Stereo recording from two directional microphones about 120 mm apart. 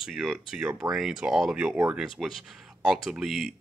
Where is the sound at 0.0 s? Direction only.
Centre (ahead or behind).